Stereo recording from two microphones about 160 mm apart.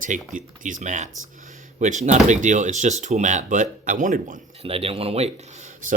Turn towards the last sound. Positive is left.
turn(degrees=-50)  # may be behind; listen again after turning